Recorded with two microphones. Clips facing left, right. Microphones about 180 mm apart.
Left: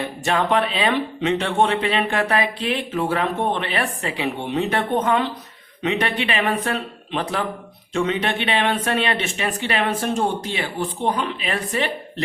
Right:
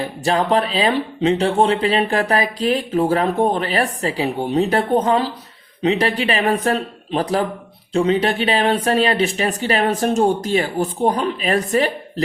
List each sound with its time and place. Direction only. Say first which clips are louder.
0.3 s speech: right 3 dB; 35° right (ahead or behind)